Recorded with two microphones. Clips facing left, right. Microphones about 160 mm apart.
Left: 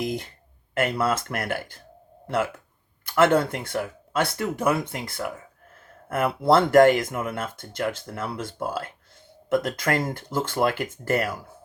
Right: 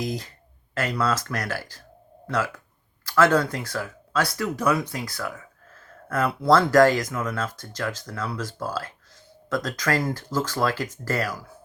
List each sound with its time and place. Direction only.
0.0 s speech: 25° left (ahead or behind)